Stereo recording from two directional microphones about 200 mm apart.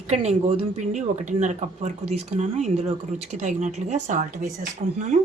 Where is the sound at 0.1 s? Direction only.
35° right (ahead or behind).